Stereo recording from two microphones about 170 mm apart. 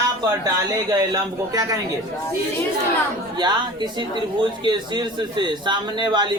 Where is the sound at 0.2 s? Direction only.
25° right (ahead or behind).